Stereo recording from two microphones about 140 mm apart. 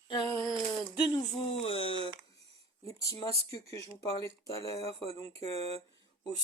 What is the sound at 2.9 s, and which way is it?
Speech, 25° left (ahead or behind).